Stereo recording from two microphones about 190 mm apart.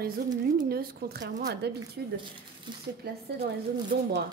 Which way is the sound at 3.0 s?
55° right (ahead or behind).